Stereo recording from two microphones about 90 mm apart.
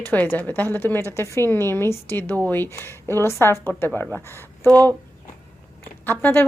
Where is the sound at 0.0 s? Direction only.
20° left (ahead or behind).